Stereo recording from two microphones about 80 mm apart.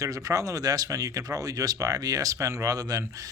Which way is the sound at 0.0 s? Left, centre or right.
Right.